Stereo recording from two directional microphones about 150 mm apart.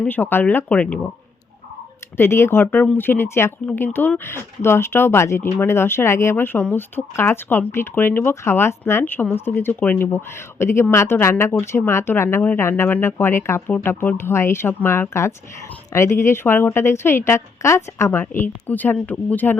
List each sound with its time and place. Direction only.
0.0 s speech: 10° left (ahead or behind)
2.1 s speech: 15° left (ahead or behind)